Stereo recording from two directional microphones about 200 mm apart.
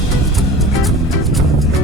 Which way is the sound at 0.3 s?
Centre (ahead or behind).